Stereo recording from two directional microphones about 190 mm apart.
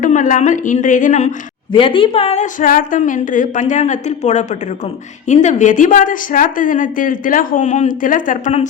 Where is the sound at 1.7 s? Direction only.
25° left (ahead or behind).